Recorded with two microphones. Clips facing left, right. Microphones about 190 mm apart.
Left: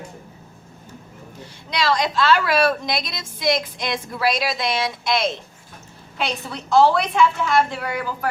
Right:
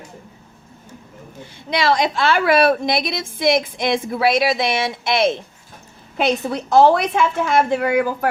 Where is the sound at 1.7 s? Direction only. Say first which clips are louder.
Right 3 dB; 55° right (ahead or behind).